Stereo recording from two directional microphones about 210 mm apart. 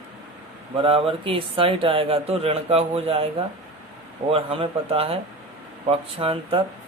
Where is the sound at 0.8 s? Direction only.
25° right (ahead or behind).